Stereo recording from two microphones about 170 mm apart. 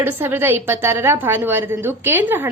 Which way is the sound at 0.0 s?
10° right (ahead or behind).